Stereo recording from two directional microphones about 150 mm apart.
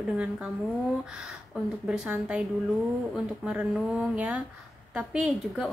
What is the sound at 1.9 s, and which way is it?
A woman's voice, 5° right (ahead or behind).